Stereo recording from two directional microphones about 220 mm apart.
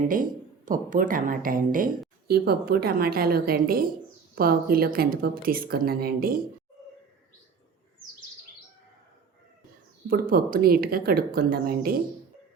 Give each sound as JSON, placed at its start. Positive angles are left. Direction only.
{"t": 0.1, "sound": "a woman's voice", "side_deg": -40}
{"t": 10.1, "sound": "a woman's voice", "side_deg": -40}